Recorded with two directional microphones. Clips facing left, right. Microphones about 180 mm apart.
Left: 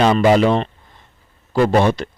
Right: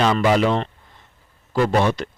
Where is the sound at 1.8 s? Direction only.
25° left (ahead or behind).